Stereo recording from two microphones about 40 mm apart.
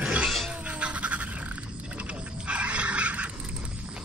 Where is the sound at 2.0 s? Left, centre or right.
Right.